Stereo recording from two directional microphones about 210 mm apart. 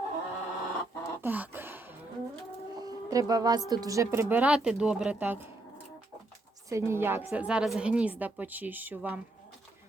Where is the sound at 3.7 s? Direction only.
15° right (ahead or behind).